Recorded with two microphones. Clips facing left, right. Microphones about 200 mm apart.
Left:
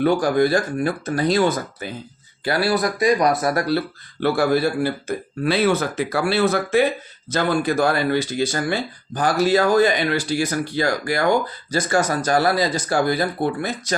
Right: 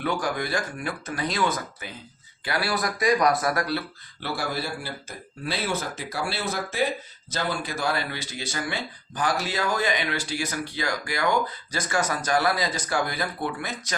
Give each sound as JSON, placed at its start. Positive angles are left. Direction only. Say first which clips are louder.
{"t": 0.0, "sound": "speech", "louder": "left 10 dB", "side_deg": 35}
{"t": 4.2, "sound": "a man's voice", "louder": "left 12 dB", "side_deg": 55}